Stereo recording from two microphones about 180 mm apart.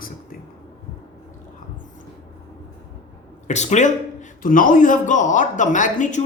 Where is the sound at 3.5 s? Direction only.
40° left (ahead or behind).